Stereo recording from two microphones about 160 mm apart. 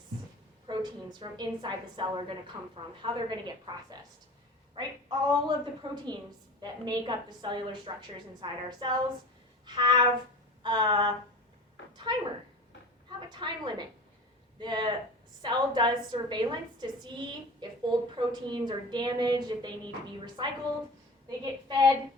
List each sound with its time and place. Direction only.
0.7 s a woman's voice: 25° right (ahead or behind)
2.5 s a woman's voice: 20° right (ahead or behind)